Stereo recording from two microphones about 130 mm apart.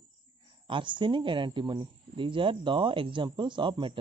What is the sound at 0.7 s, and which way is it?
Speech, 40° right (ahead or behind).